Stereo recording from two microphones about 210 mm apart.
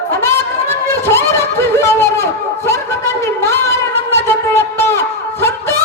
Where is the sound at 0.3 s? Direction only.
10° left (ahead or behind).